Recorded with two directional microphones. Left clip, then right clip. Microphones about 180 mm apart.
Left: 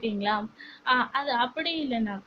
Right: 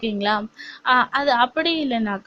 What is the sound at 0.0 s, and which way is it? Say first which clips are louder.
A woman's voice: right 6 dB; 50° right (ahead or behind).